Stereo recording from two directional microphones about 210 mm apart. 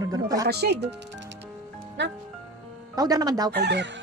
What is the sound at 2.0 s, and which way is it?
Speech, 55° right (ahead or behind).